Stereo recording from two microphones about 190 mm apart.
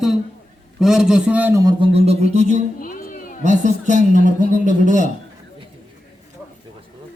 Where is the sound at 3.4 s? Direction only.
40° right (ahead or behind).